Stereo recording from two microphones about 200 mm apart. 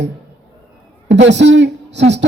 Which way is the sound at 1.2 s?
60° right (ahead or behind).